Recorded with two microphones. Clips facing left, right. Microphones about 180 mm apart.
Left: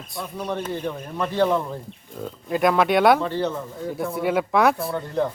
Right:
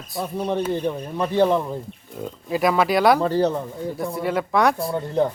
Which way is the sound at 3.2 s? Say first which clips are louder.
Right 5 dB; 40° right (ahead or behind).